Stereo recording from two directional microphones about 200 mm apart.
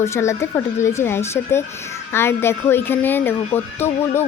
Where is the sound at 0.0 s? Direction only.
15° left (ahead or behind).